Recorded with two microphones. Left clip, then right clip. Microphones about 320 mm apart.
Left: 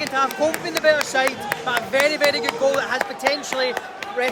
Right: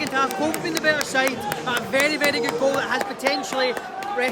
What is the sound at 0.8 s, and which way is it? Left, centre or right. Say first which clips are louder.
Speech: left 4 dB; left.